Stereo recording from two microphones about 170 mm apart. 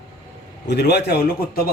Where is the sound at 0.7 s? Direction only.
75° left (ahead or behind).